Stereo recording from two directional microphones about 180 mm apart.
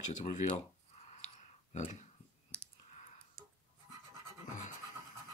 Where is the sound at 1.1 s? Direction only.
40° left (ahead or behind).